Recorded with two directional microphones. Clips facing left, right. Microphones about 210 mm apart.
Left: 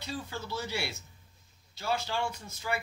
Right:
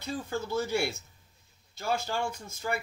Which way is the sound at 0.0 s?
50° right (ahead or behind).